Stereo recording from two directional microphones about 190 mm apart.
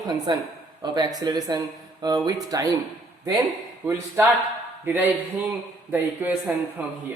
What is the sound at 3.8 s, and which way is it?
Speech, 10° right (ahead or behind).